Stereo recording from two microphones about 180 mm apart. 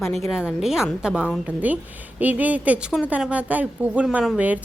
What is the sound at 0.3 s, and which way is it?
A woman's voice, 5° right (ahead or behind).